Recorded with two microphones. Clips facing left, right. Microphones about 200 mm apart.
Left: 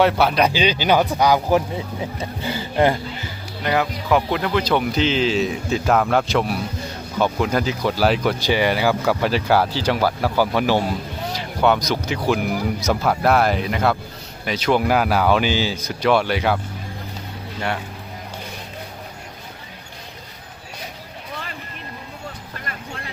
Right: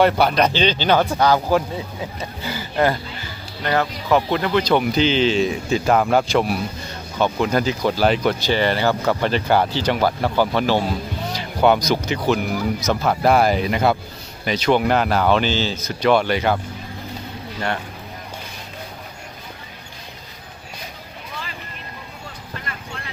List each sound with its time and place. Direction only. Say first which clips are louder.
0.0 s speech: right 1 dB; centre (ahead or behind); by 3.0 s 25° left (ahead or behind)
3.6 s speech: even; 10° left (ahead or behind)
11.3 s speech: right 2 dB; centre (ahead or behind)